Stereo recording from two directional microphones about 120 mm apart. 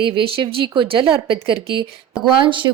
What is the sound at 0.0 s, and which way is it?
Speech, 45° right (ahead or behind).